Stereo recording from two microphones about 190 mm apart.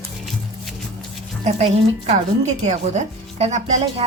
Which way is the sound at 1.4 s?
35° right (ahead or behind).